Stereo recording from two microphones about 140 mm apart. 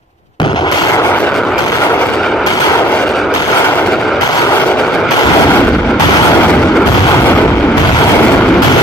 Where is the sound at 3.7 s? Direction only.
10° left (ahead or behind).